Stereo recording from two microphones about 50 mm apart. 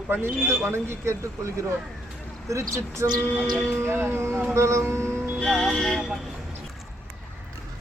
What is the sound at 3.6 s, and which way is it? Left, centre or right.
Speech, right.